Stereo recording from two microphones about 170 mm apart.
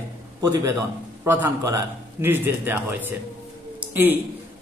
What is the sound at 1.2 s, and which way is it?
Speech, 15° right (ahead or behind).